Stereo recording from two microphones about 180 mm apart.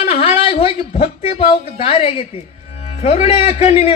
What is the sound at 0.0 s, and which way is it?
A man's voice, 35° left (ahead or behind).